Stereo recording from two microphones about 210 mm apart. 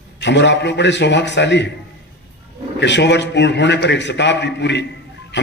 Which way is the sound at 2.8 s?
55° left (ahead or behind).